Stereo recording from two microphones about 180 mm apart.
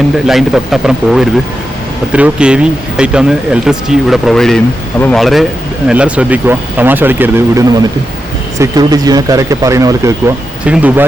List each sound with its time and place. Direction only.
0.3 s speech: centre (ahead or behind)